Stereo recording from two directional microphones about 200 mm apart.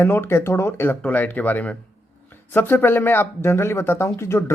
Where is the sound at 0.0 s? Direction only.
10° left (ahead or behind).